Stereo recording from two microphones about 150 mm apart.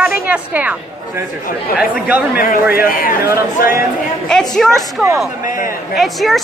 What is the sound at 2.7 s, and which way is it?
Speech, 75° left (ahead or behind).